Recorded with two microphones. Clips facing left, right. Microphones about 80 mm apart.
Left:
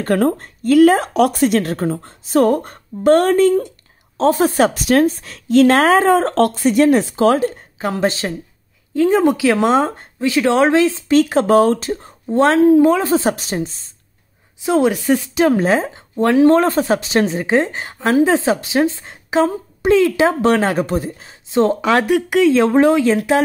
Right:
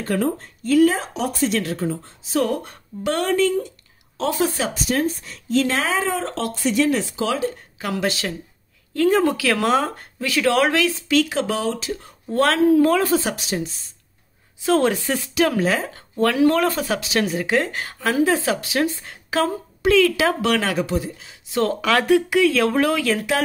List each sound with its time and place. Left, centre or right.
0.0 s speech: left
7.8 s speech: left
8.9 s speech: centre; by 12.1 s left
12.3 s speech: left
14.6 s a woman's voice: centre; by 21.4 s left
21.5 s speech: left